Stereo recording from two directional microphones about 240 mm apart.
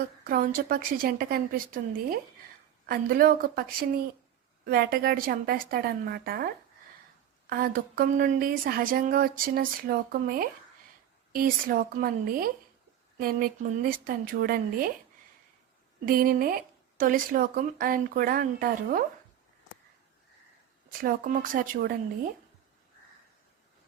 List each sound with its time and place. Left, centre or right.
0.3 s speech: right
7.5 s speech: right
16.0 s speech: right
21.0 s speech: right